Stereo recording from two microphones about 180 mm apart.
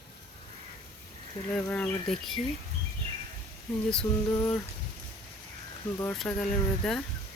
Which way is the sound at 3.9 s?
5° left (ahead or behind).